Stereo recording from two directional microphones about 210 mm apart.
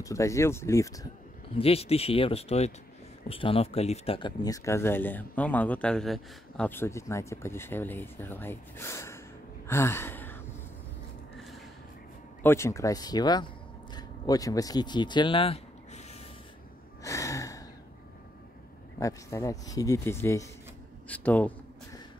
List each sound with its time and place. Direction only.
0.0 s speech: 15° left (ahead or behind)
1.6 s speech: 30° left (ahead or behind); by 9.2 s 10° left (ahead or behind)
9.7 s gasp: 10° left (ahead or behind)
11.3 s a sound: centre (ahead or behind)
12.4 s speech: 15° left (ahead or behind); by 16.2 s 30° left (ahead or behind)
17.0 s gasp: 15° left (ahead or behind)
18.9 s speech: 15° left (ahead or behind)